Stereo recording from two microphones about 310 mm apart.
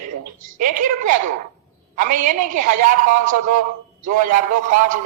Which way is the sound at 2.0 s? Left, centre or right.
Right.